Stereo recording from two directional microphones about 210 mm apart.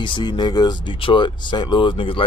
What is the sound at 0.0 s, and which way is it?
Speech, 25° left (ahead or behind).